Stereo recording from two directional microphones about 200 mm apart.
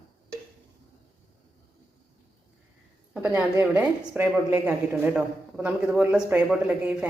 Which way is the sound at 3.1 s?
10° right (ahead or behind).